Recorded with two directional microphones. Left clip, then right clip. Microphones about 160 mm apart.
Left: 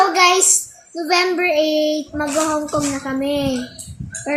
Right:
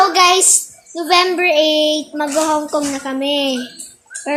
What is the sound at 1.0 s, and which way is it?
Child singing, 10° left (ahead or behind).